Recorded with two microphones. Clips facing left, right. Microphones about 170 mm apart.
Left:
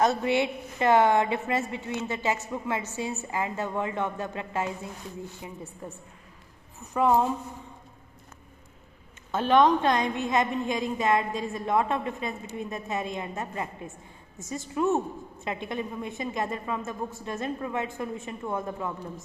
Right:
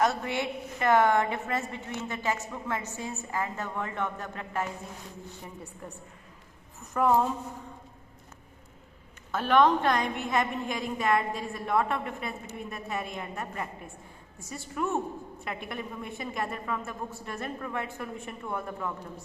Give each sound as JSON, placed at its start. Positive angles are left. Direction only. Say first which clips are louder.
{"t": 0.0, "sound": "a woman's voice", "louder": "left 4 dB", "side_deg": 20}
{"t": 7.0, "sound": "a woman's voice", "louder": "left 1 dB", "side_deg": 10}
{"t": 9.3, "sound": "a woman's voice", "louder": "left 2 dB", "side_deg": 20}